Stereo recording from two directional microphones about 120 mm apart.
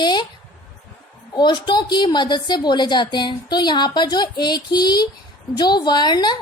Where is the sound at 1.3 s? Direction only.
40° left (ahead or behind).